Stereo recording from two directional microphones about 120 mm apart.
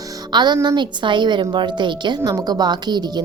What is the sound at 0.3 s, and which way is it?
A woman's voice, 35° right (ahead or behind).